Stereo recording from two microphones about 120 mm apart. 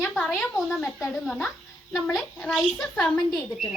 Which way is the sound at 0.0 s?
Centre (ahead or behind).